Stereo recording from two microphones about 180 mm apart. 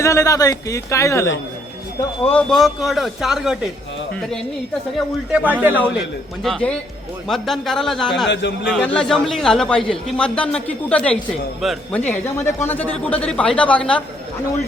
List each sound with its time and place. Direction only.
0.0 s speech: 15° left (ahead or behind)
2.3 s a man's voice: 5° left (ahead or behind)
5.3 s a man's voice: 10° right (ahead or behind)
6.4 s a man's voice: 5° left (ahead or behind)
8.3 s speech: 80° left
8.7 s a man's voice: 5° left (ahead or behind)
11.9 s speech: 10° left (ahead or behind)